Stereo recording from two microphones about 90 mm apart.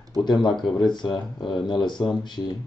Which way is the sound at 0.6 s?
55° left (ahead or behind).